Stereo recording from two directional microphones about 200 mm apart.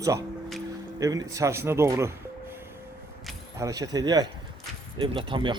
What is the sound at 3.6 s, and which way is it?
A man's voice, 15° right (ahead or behind).